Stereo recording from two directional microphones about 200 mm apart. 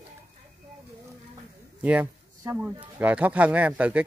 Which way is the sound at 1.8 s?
10° right (ahead or behind).